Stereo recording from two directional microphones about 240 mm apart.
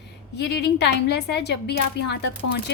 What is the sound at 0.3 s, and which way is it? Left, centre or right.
A woman's voice, left.